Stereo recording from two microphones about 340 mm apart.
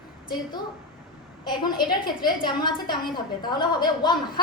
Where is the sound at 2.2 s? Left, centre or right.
Centre.